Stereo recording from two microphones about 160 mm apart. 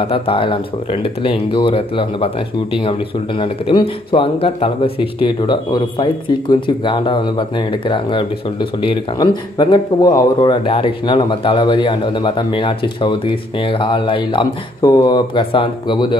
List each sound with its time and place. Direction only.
0.0 s speech: 35° left (ahead or behind)